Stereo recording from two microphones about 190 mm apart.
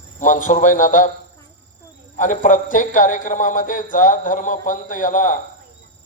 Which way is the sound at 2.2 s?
40° left (ahead or behind).